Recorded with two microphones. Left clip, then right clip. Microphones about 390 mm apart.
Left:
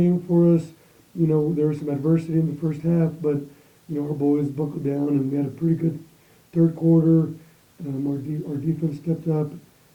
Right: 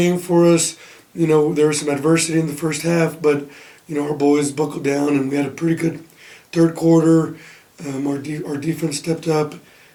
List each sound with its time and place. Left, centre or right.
0.0 s speech: centre